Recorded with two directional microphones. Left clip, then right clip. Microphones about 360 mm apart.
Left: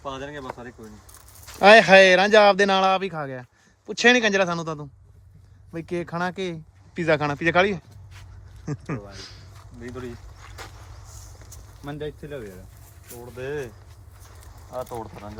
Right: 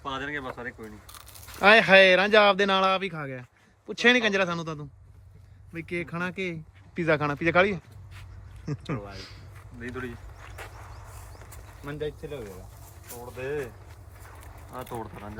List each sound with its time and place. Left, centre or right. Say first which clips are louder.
0.0 s speech: right 1 dB; centre
8.9 s speech: left 1 dB; centre
11.9 s speech: even; centre
14.7 s speech: left 5 dB; centre